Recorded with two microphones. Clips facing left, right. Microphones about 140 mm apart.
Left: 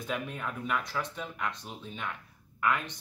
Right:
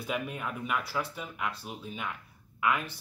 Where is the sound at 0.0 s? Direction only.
10° right (ahead or behind).